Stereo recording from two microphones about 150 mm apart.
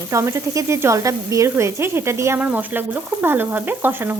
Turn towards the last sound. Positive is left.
turn(degrees=-15)  # may be behind; listen again after turning